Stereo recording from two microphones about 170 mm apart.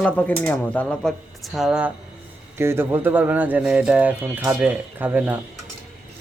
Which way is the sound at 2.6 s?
15° right (ahead or behind).